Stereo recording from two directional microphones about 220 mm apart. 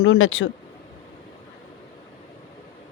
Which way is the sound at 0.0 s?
65° left (ahead or behind).